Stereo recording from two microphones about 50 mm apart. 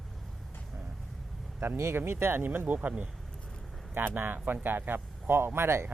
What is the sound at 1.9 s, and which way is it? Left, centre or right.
Speech, right.